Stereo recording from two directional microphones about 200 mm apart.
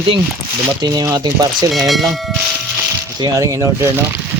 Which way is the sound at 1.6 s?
Centre (ahead or behind).